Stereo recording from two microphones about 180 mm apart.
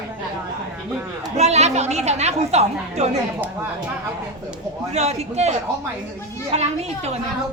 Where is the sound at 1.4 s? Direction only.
35° right (ahead or behind).